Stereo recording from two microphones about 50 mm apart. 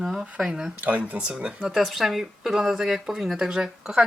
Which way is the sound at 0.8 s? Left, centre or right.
Right.